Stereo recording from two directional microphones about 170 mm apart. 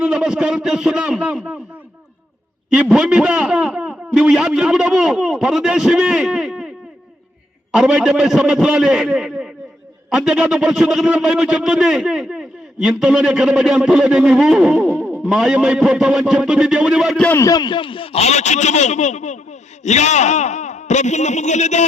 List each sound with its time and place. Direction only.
0.0 s a man's voice: 5° right (ahead or behind)
2.7 s a man's voice: 5° right (ahead or behind)
7.7 s a man's voice: 5° right (ahead or behind)
15.3 s a man's voice: 5° right (ahead or behind)
17.2 s a man's voice: 15° left (ahead or behind); by 21.8 s 45° left (ahead or behind)